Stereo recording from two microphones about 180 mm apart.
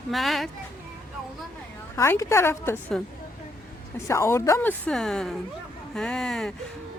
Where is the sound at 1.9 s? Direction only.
15° left (ahead or behind).